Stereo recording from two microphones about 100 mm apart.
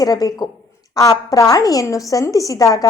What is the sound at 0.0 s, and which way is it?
A woman's voice, 40° left (ahead or behind).